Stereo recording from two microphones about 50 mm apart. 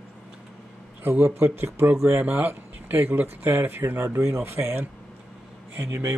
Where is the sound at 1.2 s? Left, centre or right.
Right.